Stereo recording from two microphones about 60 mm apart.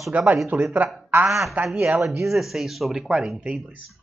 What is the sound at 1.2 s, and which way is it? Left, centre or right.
Speech, centre.